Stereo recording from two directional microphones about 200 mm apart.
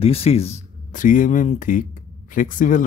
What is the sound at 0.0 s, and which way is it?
A man's voice, 30° left (ahead or behind).